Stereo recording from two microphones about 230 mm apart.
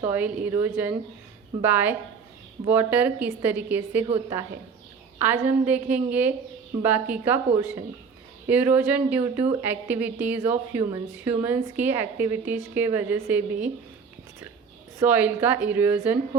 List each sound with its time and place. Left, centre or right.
0.0 s a woman's voice: centre
5.2 s a woman's voice: centre
14.9 s a woman's voice: centre